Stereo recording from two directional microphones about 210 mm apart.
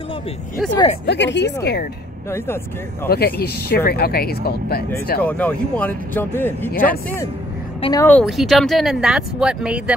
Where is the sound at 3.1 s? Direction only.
45° left (ahead or behind).